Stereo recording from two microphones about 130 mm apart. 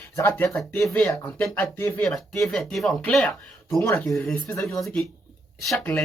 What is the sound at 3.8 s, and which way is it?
Speech, 15° left (ahead or behind).